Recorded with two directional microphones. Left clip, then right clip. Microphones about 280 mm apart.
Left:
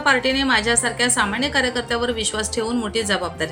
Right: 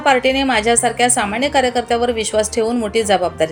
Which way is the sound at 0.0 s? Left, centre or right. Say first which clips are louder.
Right 4 dB; centre.